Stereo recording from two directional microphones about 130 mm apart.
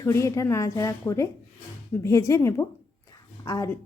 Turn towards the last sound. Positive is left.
turn(degrees=25)  # may be behind; listen again after turning